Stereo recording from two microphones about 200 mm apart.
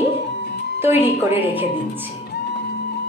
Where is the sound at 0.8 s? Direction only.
10° right (ahead or behind).